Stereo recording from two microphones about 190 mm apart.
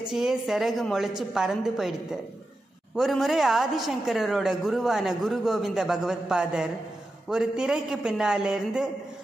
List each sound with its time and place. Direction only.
0.0 s a woman's voice: 5° right (ahead or behind)
3.0 s a woman's voice: centre (ahead or behind)